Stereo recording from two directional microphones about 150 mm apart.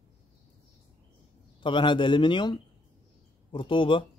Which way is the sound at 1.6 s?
30° left (ahead or behind).